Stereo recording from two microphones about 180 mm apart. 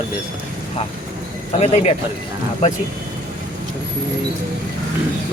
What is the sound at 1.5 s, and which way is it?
Speech, 35° left (ahead or behind).